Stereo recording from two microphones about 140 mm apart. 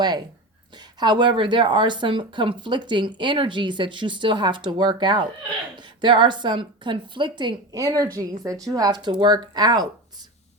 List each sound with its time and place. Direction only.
0.9 s a woman's voice: 30° right (ahead or behind)